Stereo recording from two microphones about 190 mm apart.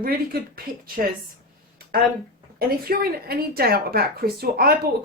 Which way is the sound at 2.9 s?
55° right (ahead or behind).